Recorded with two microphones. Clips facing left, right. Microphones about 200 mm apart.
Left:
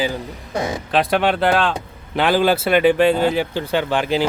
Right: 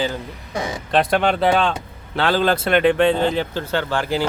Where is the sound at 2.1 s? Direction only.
15° left (ahead or behind).